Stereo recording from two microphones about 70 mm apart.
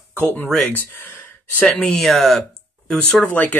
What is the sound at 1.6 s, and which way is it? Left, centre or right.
Speech, left.